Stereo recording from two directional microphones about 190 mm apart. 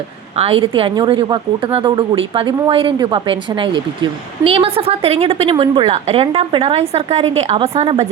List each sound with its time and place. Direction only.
0.3 s a woman's voice: 30° right (ahead or behind)